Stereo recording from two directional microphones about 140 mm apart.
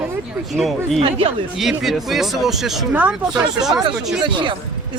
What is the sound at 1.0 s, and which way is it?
Speech, 40° right (ahead or behind).